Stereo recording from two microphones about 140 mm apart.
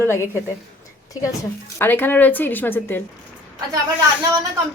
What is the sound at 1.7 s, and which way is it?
A woman's voice, 15° left (ahead or behind).